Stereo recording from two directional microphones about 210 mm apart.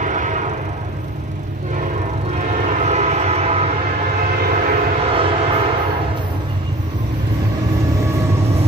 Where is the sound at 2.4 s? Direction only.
35° right (ahead or behind).